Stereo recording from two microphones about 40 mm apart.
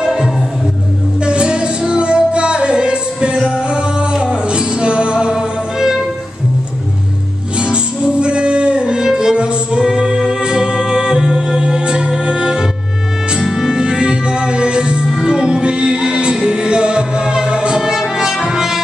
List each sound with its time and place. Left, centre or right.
0.0 s music: centre
1.2 s music: right
7.5 s music: right
13.4 s music: centre
13.7 s music: right